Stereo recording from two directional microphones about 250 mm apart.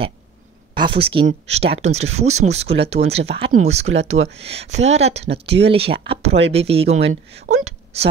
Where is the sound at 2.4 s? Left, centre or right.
Right.